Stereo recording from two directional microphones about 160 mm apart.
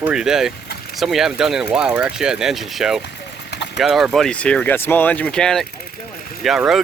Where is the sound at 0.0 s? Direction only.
5° right (ahead or behind).